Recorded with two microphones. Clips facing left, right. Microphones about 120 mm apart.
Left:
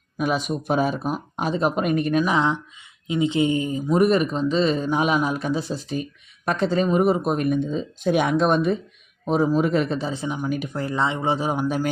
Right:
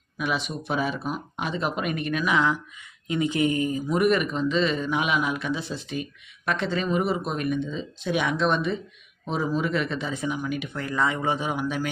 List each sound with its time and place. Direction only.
0.2 s speech: 45° left (ahead or behind)